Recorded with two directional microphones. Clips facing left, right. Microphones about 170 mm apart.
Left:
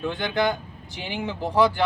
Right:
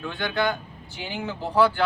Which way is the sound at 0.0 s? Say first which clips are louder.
Left 2 dB; 15° left (ahead or behind).